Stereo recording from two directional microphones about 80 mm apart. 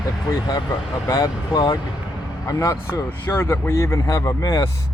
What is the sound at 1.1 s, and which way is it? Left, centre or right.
Speech, left.